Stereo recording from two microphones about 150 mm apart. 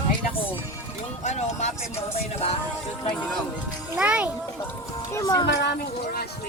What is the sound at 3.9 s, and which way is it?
Speech, 10° right (ahead or behind).